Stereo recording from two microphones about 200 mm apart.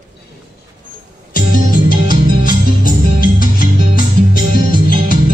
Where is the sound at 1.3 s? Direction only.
45° left (ahead or behind).